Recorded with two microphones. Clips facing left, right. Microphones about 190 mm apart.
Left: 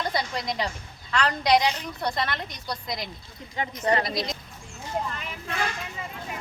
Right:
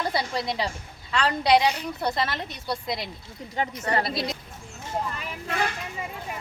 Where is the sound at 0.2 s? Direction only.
30° right (ahead or behind).